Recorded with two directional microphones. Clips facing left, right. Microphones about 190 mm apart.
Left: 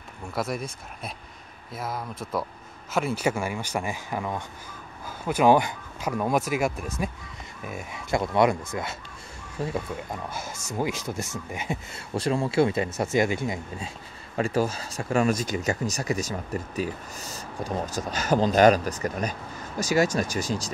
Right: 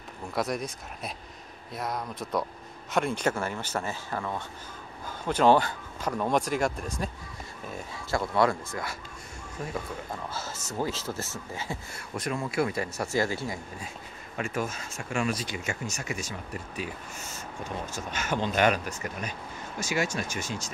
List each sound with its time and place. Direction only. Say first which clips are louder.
0.3 s speech: even; centre (ahead or behind); by 8.9 s 20° left (ahead or behind)
9.6 s speech: left 6 dB; 30° left (ahead or behind)
10.3 s speech: left 2 dB; 15° left (ahead or behind)
12.1 s speech: left 6 dB; 30° left (ahead or behind)
14.3 s speech: left 7 dB; 35° left (ahead or behind)